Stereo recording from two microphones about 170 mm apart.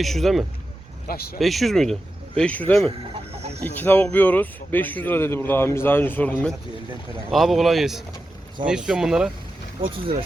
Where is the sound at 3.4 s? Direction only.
40° right (ahead or behind).